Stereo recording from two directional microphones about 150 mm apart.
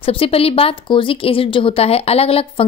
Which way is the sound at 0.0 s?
40° left (ahead or behind).